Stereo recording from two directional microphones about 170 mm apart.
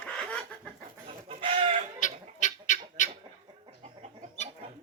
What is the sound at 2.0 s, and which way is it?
Bird, 45° left (ahead or behind).